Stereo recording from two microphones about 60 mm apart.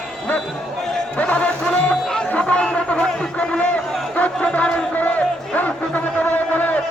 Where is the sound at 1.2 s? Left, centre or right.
Left.